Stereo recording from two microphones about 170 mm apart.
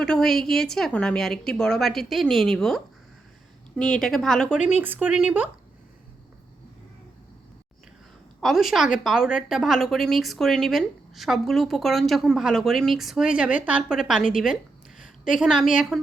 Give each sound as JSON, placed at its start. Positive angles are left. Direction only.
{"t": 0.0, "sound": "a woman's voice", "side_deg": 5}
{"t": 4.7, "sound": "speech", "side_deg": -10}
{"t": 8.4, "sound": "a woman's voice", "side_deg": 0}